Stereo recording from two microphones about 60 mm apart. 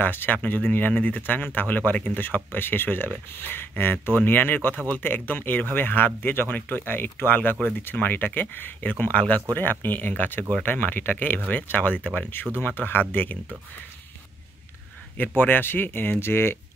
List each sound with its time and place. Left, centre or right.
0.0 s speech: left
15.1 s speech: left